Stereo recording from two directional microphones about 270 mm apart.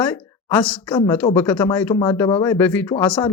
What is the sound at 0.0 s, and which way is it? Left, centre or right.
A woman's voice, centre.